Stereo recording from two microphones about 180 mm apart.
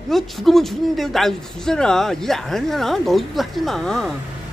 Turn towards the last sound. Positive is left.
turn(degrees=5)  # may be behind; listen again after turning